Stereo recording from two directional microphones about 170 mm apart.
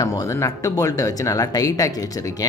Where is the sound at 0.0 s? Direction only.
20° left (ahead or behind).